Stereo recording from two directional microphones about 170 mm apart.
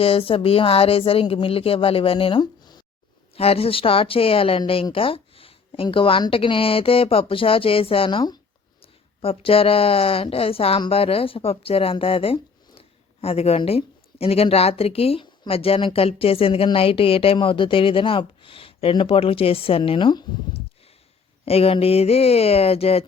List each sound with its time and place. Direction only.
0.0 s speech: 35° left (ahead or behind)
3.3 s speech: 35° left (ahead or behind)
21.4 s speech: 35° left (ahead or behind)